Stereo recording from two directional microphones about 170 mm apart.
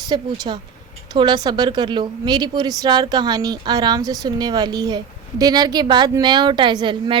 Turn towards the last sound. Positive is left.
turn(degrees=-25)  # may be behind; listen again after turning